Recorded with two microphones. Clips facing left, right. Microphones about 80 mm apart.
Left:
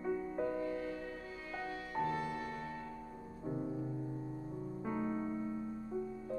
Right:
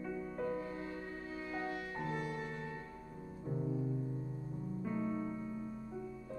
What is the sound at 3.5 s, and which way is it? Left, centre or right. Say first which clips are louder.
Music: left 1 dB; centre.